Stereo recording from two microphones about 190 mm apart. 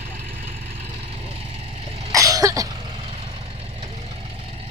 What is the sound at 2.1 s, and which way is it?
Cough, 20° right (ahead or behind).